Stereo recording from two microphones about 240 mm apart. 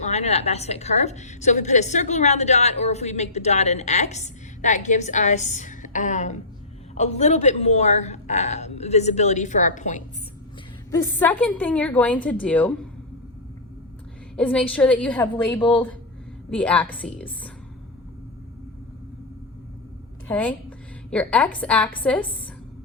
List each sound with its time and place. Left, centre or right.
0.0 s a woman's voice: left
10.9 s a woman's voice: centre
14.3 s a woman's voice: centre
20.2 s a woman's voice: centre